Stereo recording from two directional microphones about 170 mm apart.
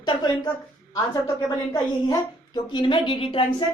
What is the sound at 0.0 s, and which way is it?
A woman's voice, 25° left (ahead or behind).